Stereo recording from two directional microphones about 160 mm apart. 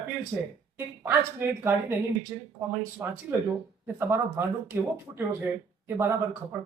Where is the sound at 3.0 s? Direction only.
10° right (ahead or behind).